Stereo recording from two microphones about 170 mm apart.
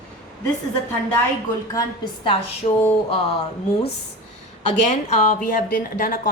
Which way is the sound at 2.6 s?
35° left (ahead or behind).